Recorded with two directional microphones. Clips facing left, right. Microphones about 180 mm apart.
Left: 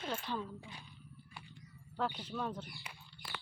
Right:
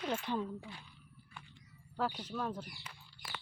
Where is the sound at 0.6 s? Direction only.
20° left (ahead or behind).